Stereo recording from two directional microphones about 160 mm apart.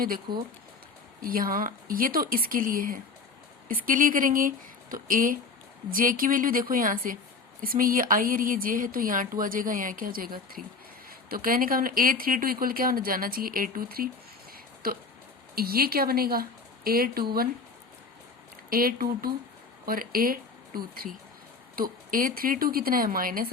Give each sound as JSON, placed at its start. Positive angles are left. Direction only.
{"t": 0.0, "sound": "speech", "side_deg": -65}
{"t": 14.5, "sound": "a sound", "side_deg": -65}
{"t": 15.5, "sound": "speech", "side_deg": -70}
{"t": 18.7, "sound": "speech", "side_deg": -65}